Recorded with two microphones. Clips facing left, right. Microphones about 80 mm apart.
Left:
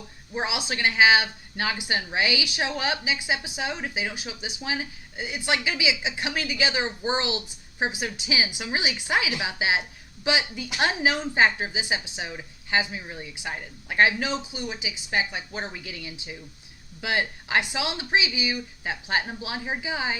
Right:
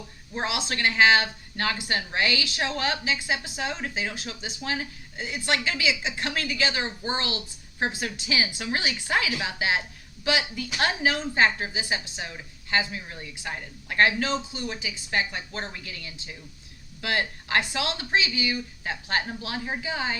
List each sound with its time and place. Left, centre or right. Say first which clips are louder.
0.3 s a woman's voice: even; centre